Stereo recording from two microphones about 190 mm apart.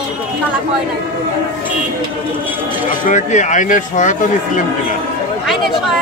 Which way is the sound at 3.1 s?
40° left (ahead or behind).